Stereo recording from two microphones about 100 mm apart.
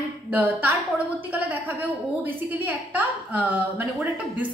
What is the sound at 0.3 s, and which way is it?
A woman's voice, 15° right (ahead or behind).